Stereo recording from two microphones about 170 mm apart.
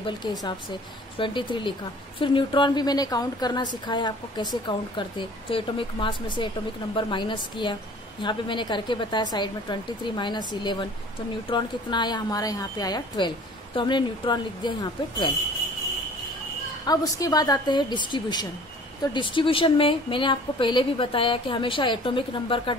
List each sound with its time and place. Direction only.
0.0 s a woman's voice: 25° left (ahead or behind)
16.8 s a woman's voice: 20° left (ahead or behind)